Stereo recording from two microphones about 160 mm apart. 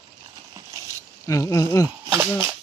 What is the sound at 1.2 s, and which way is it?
Speech, 20° left (ahead or behind).